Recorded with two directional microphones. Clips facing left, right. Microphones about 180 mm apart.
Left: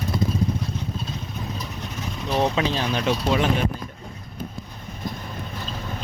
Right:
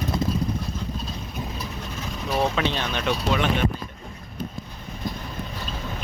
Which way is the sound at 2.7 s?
35° left (ahead or behind).